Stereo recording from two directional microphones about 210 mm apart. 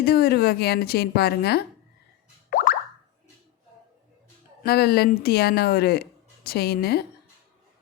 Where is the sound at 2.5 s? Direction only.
40° left (ahead or behind).